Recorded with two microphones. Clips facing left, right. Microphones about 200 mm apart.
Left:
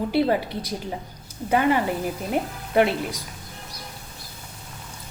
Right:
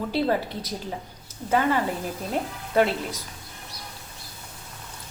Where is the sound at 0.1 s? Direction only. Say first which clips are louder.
Left 2 dB; 10° left (ahead or behind).